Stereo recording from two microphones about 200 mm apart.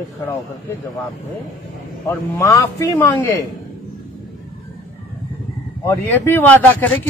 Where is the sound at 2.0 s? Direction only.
15° left (ahead or behind).